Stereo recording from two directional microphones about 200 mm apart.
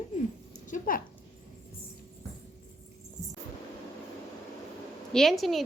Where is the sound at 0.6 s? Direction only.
40° left (ahead or behind).